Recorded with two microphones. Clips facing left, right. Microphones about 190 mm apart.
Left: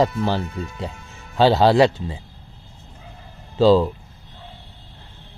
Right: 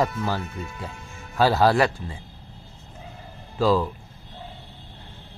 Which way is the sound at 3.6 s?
25° left (ahead or behind).